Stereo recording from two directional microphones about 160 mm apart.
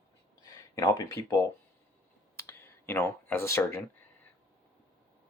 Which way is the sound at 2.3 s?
15° left (ahead or behind).